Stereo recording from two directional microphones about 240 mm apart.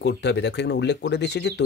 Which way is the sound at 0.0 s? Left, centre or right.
Left.